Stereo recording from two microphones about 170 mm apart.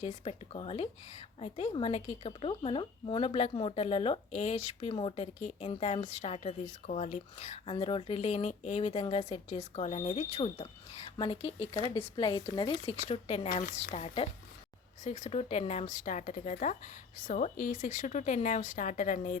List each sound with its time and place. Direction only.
0.0 s a woman's voice: 35° left (ahead or behind)
13.5 s speech: 50° left (ahead or behind)
13.9 s a woman's voice: 35° left (ahead or behind)
15.0 s speech: 45° left (ahead or behind)